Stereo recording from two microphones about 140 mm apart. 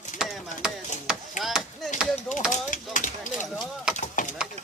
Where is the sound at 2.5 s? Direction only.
65° left (ahead or behind).